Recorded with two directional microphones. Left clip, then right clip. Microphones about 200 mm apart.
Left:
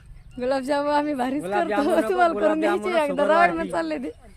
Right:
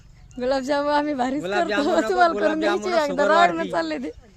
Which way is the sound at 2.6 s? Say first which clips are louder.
Even; 45° right (ahead or behind).